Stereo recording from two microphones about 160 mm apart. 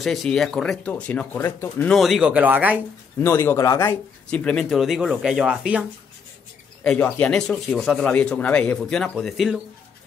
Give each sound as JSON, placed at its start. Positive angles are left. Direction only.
{"t": 0.0, "sound": "speech", "side_deg": 0}
{"t": 1.9, "sound": "speech", "side_deg": 0}
{"t": 3.2, "sound": "speech", "side_deg": 15}
{"t": 4.3, "sound": "speech", "side_deg": 5}
{"t": 6.8, "sound": "speech", "side_deg": 5}